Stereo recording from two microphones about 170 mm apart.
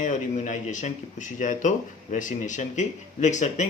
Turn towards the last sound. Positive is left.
turn(degrees=45)  # may be behind; listen again after turning